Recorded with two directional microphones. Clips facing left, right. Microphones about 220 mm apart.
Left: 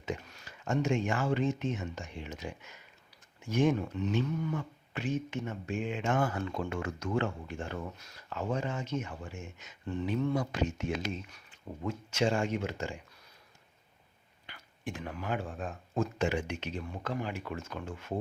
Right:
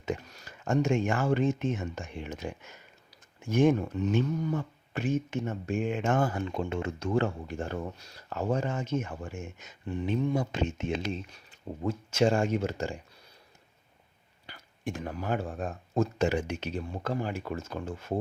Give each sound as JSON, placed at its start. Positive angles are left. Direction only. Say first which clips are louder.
{"t": 0.0, "sound": "speech", "louder": "right 4 dB", "side_deg": -45}
{"t": 6.2, "sound": "speech", "louder": "right 3 dB", "side_deg": -30}
{"t": 9.8, "sound": "speech", "louder": "right 2 dB", "side_deg": -15}
{"t": 10.3, "sound": "speech", "louder": "right 2 dB", "side_deg": -25}
{"t": 11.8, "sound": "speech", "louder": "right 5 dB", "side_deg": -40}
{"t": 14.4, "sound": "speech", "louder": "right 4 dB", "side_deg": -40}